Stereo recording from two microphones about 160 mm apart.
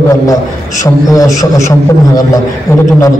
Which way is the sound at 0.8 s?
20° left (ahead or behind).